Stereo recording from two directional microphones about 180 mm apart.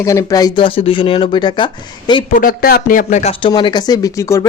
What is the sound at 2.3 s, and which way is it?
Speech, 50° left (ahead or behind).